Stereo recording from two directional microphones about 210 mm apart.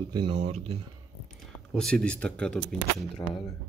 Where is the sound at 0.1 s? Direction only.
25° right (ahead or behind).